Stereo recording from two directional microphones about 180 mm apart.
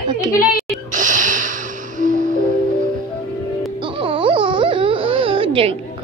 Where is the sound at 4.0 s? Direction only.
30° right (ahead or behind).